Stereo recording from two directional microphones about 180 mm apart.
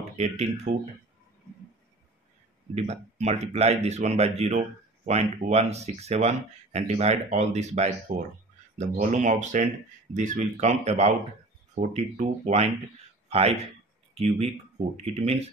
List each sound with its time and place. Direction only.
0.2 s speech: 40° right (ahead or behind)
2.7 s speech: 40° right (ahead or behind)